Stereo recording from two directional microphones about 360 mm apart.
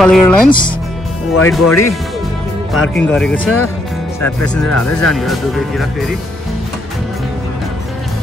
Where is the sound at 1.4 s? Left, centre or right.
Left.